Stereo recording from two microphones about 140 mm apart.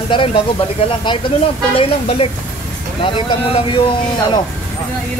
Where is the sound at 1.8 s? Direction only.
45° left (ahead or behind).